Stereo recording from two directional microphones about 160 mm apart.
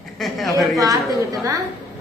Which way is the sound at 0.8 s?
20° right (ahead or behind).